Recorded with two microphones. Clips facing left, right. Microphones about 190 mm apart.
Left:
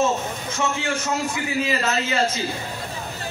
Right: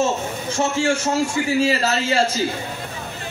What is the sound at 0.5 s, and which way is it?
A man's voice, 30° right (ahead or behind).